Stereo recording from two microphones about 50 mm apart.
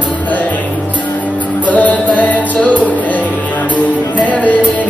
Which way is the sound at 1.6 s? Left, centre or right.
Left.